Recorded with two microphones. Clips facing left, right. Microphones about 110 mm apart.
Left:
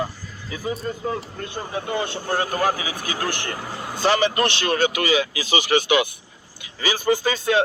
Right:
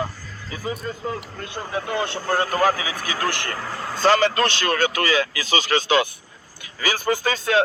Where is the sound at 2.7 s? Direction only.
20° left (ahead or behind).